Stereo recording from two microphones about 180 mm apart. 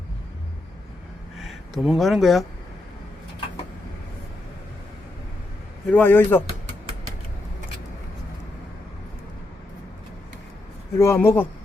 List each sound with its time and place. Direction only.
1.4 s speech: centre (ahead or behind)
5.9 s speech: 10° left (ahead or behind)
10.9 s speech: 15° left (ahead or behind)